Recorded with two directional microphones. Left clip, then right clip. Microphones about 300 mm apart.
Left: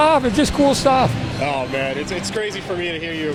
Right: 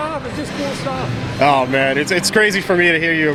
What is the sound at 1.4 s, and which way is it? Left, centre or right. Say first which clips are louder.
Speech: right 8 dB; right.